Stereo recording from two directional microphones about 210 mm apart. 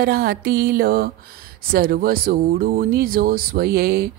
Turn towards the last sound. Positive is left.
turn(degrees=-45)  # may be behind; listen again after turning